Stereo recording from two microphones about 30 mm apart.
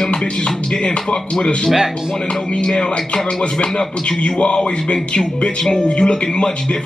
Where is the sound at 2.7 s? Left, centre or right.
Left.